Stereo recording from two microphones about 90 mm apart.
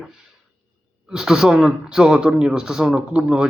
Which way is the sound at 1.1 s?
5° right (ahead or behind).